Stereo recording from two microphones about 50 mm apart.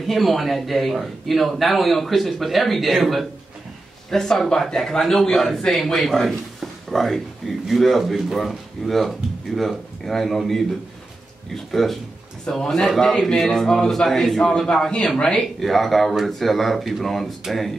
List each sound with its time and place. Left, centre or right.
0.0 s a man's voice: centre
15.1 s speech: centre
15.6 s a man's voice: centre